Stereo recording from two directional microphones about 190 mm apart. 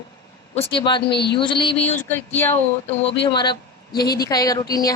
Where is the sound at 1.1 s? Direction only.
60° left (ahead or behind).